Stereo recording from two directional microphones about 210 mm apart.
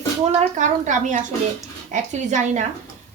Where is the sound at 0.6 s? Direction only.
35° right (ahead or behind).